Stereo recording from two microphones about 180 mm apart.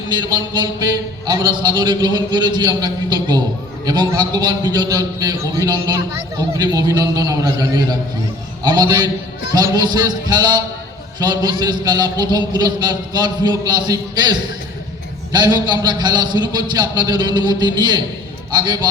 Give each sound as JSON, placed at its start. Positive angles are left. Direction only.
{"t": 0.1, "sound": "a man's voice", "side_deg": -25}